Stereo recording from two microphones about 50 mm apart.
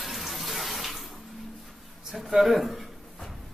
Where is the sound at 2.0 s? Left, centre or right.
Centre.